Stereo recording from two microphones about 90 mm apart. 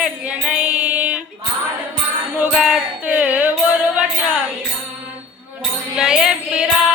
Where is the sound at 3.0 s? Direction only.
15° right (ahead or behind).